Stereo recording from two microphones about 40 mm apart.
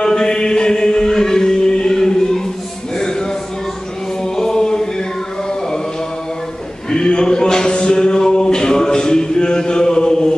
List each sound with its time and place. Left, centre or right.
0.0 s chant: centre
3.0 s music: centre
4.2 s chant: centre
6.9 s a sound: centre